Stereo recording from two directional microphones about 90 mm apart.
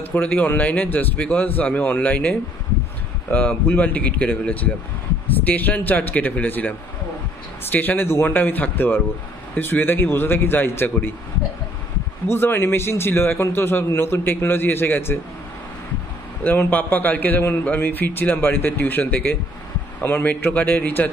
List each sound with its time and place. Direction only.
0.0 s a man's voice: 20° left (ahead or behind)
12.3 s a man's voice: 25° left (ahead or behind)
16.4 s a man's voice: 20° left (ahead or behind)